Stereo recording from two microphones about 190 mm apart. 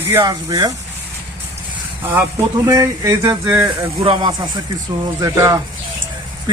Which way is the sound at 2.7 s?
15° right (ahead or behind).